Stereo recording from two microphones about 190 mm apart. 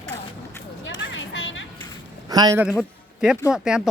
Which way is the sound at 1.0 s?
80° left.